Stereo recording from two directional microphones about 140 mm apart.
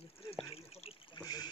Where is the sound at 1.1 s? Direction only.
30° left (ahead or behind).